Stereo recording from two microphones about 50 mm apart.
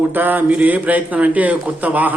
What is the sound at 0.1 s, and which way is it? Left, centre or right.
Speech, right.